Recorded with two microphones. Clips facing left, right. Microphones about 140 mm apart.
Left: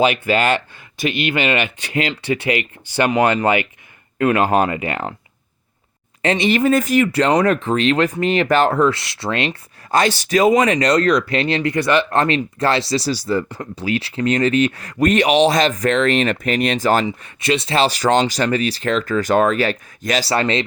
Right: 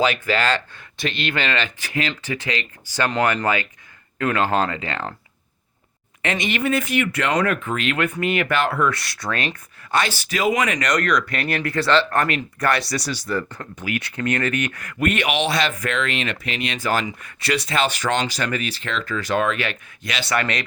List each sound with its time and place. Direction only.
0.0 s speech: 15° left (ahead or behind)
6.2 s speech: 35° left (ahead or behind)
8.9 s speech: 25° left (ahead or behind)
9.9 s speech: 40° left (ahead or behind); by 12.2 s 15° left (ahead or behind)
12.2 s speech: 25° left (ahead or behind)